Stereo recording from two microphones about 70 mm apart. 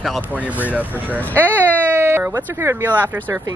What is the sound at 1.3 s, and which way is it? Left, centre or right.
Baby cry, right.